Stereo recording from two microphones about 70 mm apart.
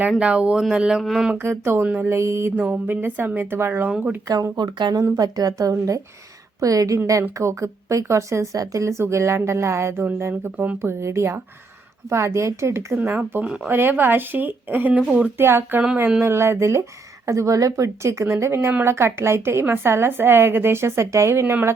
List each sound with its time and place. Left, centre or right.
0.2 s speech: centre
1.4 s a woman's voice: right
1.8 s speech: right
2.0 s a woman's voice: right
2.6 s speech: right
4.5 s speech: right
5.1 s a woman's voice: right
8.5 s a woman's voice: right
13.0 s a woman's voice: right